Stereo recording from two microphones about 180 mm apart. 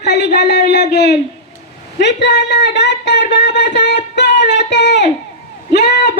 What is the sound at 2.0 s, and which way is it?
A woman's voice, 75° left (ahead or behind).